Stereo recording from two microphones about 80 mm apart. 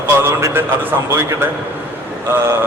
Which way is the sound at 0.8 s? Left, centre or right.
Right.